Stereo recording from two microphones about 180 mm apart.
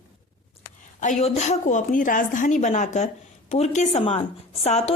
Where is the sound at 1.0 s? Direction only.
40° left (ahead or behind).